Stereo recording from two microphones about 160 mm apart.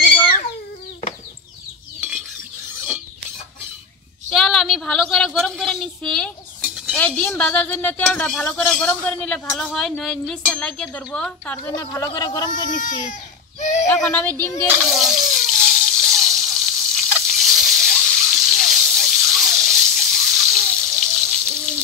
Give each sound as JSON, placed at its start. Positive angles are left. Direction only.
{"t": 0.0, "sound": "chicken", "side_deg": 10}
{"t": 4.3, "sound": "a sound", "side_deg": 0}
{"t": 7.0, "sound": "a man's voice", "side_deg": 10}
{"t": 11.7, "sound": "a woman's voice", "side_deg": 20}
{"t": 12.7, "sound": "speech", "side_deg": 55}
{"t": 13.6, "sound": "a sound", "side_deg": 50}
{"t": 14.1, "sound": "a man's voice", "side_deg": 10}
{"t": 14.9, "sound": "water", "side_deg": 0}
{"t": 17.3, "sound": "a sound", "side_deg": 0}